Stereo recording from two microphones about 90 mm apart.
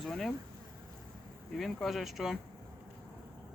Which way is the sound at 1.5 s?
Centre (ahead or behind).